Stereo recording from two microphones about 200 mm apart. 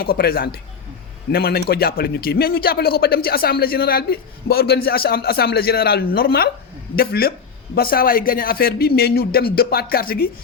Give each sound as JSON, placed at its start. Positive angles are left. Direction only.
{"t": 0.0, "sound": "a man's voice", "side_deg": 50}